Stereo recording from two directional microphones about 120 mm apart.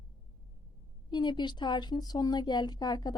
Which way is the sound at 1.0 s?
40° left (ahead or behind).